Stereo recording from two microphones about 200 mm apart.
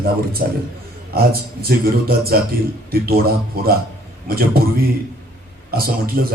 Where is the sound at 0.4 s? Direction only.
45° right (ahead or behind).